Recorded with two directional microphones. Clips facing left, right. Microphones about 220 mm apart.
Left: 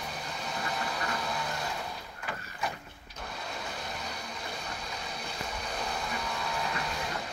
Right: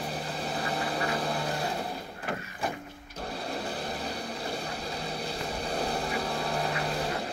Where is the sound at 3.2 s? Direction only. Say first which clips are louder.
Right 6 dB; 30° right (ahead or behind).